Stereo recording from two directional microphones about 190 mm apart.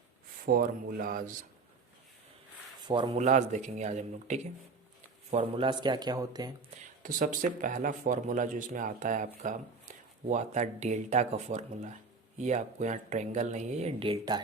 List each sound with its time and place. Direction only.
0.4 s speech: 50° right (ahead or behind)
2.8 s speech: 25° right (ahead or behind)
3.2 s speech: 40° right (ahead or behind); by 6.5 s 20° right (ahead or behind)
7.0 s speech: 45° right (ahead or behind); by 14.4 s 25° right (ahead or behind)